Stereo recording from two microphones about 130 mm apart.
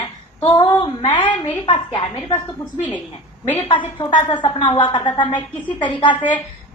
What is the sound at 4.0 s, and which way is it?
Speech, 35° left (ahead or behind).